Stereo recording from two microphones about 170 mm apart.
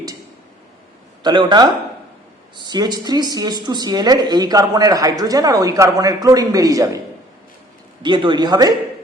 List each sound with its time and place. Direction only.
1.2 s speech: 25° right (ahead or behind)
8.0 s speech: 25° right (ahead or behind)